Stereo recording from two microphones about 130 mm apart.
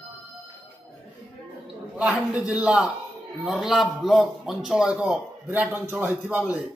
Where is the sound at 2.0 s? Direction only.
Centre (ahead or behind).